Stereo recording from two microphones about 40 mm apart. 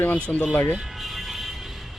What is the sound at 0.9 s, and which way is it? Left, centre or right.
Vehicle, centre.